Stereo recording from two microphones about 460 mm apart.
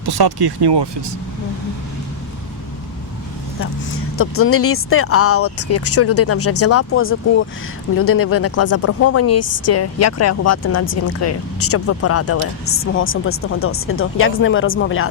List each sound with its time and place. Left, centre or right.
0.0 s speech: right
4.2 s speech: left